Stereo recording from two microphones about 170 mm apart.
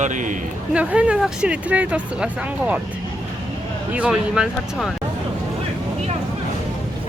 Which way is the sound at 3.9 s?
5° right (ahead or behind).